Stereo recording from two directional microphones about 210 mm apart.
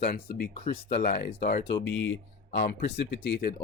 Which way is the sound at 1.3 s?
50° left (ahead or behind).